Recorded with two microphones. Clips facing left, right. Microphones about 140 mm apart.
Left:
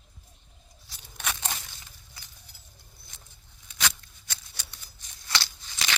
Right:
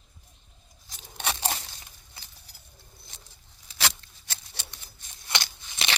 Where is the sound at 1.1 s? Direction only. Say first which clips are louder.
Right 4 dB; 30° right (ahead or behind).